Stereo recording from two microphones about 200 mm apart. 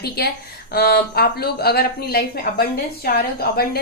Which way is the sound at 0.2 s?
50° left (ahead or behind).